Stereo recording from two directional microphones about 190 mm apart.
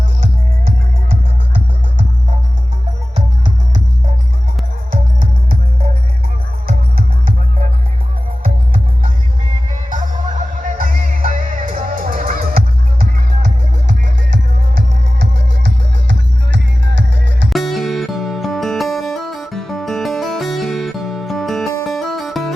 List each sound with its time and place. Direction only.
4.9 s music: 50° right (ahead or behind)
6.7 s music: 50° right (ahead or behind)
8.4 s music: 35° right (ahead or behind)
15.2 s music: 70° right (ahead or behind)
17.5 s music: centre (ahead or behind)